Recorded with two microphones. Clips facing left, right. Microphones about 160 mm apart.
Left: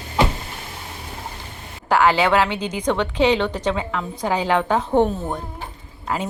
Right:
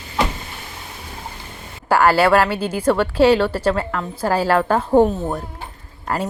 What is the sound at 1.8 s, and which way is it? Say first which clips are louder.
A woman's voice: right 2 dB; 10° right (ahead or behind).